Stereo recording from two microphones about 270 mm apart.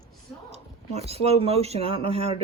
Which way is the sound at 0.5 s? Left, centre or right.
Right.